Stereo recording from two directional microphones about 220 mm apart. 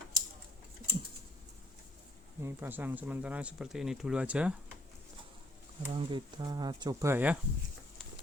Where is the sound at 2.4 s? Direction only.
10° right (ahead or behind).